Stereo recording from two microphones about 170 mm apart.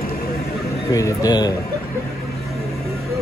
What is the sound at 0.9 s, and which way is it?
Speech, 20° left (ahead or behind).